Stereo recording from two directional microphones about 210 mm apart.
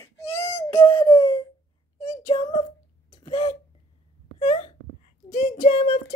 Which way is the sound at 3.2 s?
30° left (ahead or behind).